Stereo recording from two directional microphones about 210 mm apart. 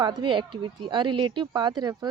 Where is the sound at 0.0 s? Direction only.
20° right (ahead or behind).